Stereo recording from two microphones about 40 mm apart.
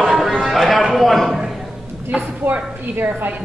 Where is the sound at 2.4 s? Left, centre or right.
Right.